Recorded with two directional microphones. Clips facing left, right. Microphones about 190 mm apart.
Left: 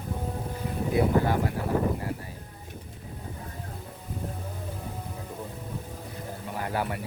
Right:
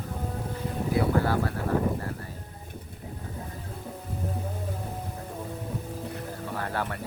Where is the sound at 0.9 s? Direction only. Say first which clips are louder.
Left 1 dB; 20° left (ahead or behind).